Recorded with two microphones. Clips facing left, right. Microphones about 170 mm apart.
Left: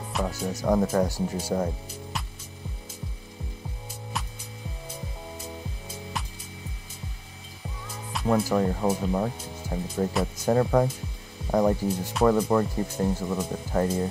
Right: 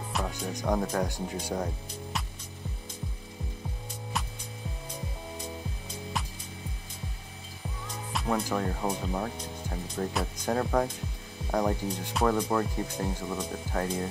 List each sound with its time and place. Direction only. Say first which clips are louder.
0.1 s speech: left 5 dB; 5° left (ahead or behind)
8.1 s speech: left 6 dB; centre (ahead or behind)